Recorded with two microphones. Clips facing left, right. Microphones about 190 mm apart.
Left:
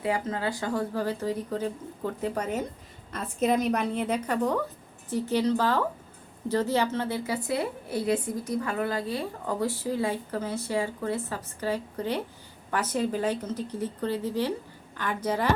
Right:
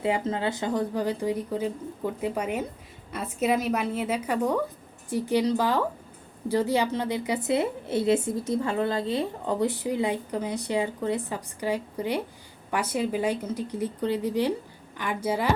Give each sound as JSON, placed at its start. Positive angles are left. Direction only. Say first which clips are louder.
{"t": 0.0, "sound": "a woman's voice", "louder": "right 2 dB", "side_deg": -25}